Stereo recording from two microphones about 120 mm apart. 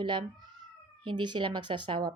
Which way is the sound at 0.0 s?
45° right (ahead or behind).